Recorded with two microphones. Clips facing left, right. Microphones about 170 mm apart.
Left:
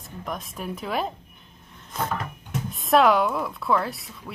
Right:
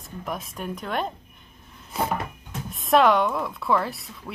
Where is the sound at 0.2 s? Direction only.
Centre (ahead or behind).